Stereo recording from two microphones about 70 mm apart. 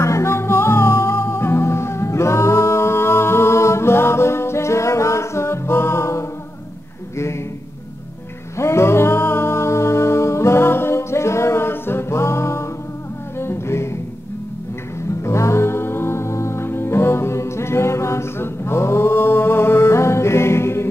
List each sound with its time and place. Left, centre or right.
0.0 s music: left
8.5 s music: left
15.2 s music: left